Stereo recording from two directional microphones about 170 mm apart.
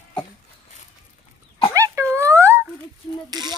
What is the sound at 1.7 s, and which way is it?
Dog, 15° right (ahead or behind).